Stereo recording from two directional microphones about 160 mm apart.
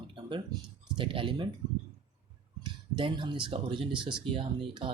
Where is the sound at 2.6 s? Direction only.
30° right (ahead or behind).